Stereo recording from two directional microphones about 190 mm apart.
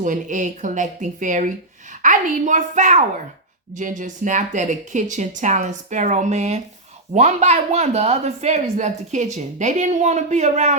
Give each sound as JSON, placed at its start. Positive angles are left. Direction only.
{"t": 0.0, "sound": "speech", "side_deg": -40}